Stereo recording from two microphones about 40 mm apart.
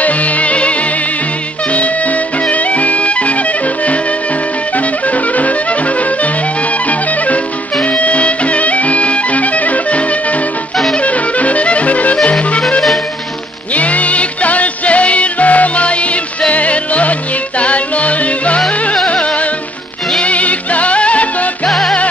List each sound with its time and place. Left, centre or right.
0.0 s music: left
2.4 s music: left
4.7 s music: left
7.8 s music: left
13.7 s music: left
20.2 s music: left
21.6 s music: centre